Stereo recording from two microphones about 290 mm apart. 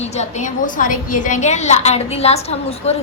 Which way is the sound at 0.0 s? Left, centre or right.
Left.